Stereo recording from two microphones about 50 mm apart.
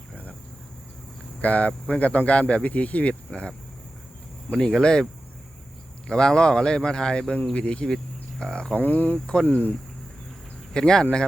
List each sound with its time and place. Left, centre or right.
1.4 s speech: left
4.5 s speech: centre
6.1 s a man's voice: centre
8.8 s speech: left
9.2 s a man's voice: centre
10.8 s a man's voice: centre